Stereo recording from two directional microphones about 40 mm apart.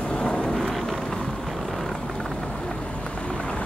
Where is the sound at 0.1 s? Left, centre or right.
Left.